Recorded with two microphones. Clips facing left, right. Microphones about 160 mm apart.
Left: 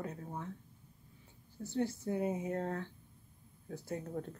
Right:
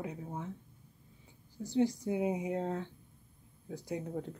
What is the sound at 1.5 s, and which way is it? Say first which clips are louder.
Speech: right 5 dB; 15° right (ahead or behind).